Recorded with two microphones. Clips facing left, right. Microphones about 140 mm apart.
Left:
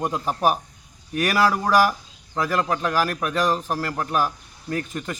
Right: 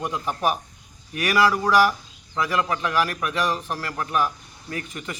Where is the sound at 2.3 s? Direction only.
45° left (ahead or behind).